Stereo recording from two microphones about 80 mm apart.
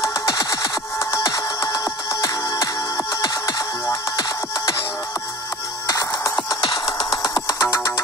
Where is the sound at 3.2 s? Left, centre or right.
Left.